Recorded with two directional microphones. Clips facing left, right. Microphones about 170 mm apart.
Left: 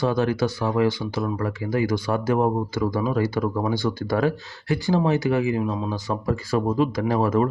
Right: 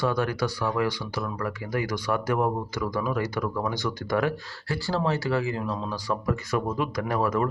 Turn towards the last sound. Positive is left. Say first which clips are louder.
# left 4 dB
turn(degrees=25)  # may be behind; listen again after turning